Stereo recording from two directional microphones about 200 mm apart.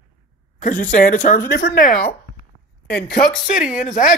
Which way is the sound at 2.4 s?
50° left (ahead or behind).